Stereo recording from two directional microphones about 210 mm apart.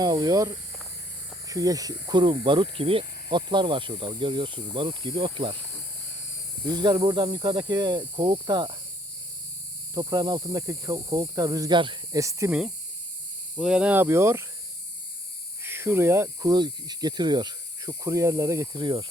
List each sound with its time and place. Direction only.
0.0 s speech: 20° right (ahead or behind)
6.7 s speech: 20° right (ahead or behind)
9.9 s speech: 20° right (ahead or behind)
15.6 s speech: 10° right (ahead or behind)